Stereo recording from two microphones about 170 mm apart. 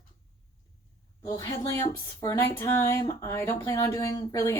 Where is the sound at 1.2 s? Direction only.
20° left (ahead or behind).